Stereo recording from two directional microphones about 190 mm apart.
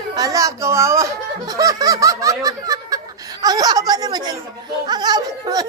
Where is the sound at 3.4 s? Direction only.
20° right (ahead or behind).